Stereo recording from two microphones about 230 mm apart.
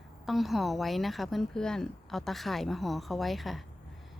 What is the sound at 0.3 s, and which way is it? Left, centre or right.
Speech, centre.